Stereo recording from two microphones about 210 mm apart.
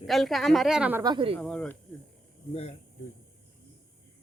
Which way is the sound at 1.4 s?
5° left (ahead or behind).